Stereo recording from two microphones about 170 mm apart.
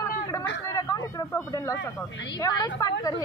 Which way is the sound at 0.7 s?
20° left (ahead or behind).